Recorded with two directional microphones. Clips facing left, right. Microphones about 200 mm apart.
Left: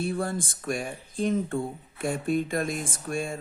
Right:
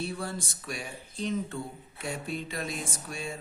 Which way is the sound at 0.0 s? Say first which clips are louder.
Left 6 dB; 50° left (ahead or behind).